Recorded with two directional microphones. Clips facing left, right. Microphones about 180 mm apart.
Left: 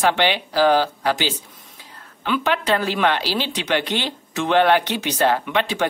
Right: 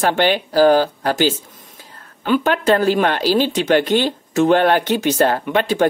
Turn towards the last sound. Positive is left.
turn(degrees=-45)  # may be behind; listen again after turning